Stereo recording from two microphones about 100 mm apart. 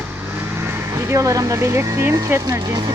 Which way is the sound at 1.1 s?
35° right (ahead or behind).